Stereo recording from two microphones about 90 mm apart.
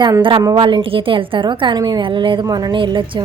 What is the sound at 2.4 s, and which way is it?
Speech, 45° right (ahead or behind).